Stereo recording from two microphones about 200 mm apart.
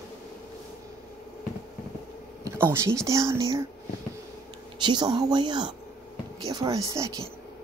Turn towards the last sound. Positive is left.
turn(degrees=-15)  # may be behind; listen again after turning